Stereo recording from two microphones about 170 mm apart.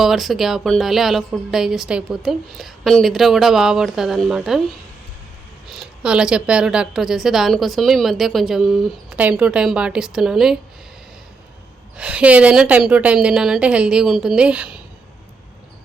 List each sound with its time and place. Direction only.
0.0 s a woman's voice: centre (ahead or behind)
5.7 s a woman's voice: 5° right (ahead or behind)
11.9 s a woman's voice: 5° right (ahead or behind)